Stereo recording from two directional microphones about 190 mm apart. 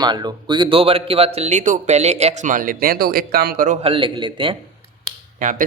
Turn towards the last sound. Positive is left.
turn(degrees=-45)  # may be behind; listen again after turning